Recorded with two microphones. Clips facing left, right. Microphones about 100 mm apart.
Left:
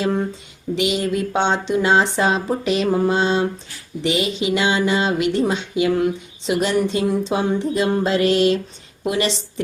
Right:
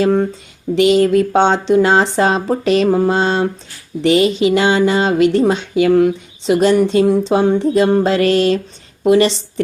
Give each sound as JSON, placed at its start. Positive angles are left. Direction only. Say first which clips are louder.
{"t": 0.0, "sound": "speech", "louder": "right 7 dB", "side_deg": -40}
{"t": 4.4, "sound": "a sound", "louder": "right 6 dB", "side_deg": -45}
{"t": 6.4, "sound": "speech", "louder": "right 7 dB", "side_deg": -35}